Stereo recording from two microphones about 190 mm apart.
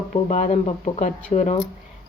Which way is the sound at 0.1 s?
40° left (ahead or behind).